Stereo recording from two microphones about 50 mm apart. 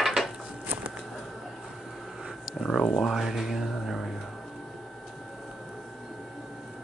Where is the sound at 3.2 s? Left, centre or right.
Centre.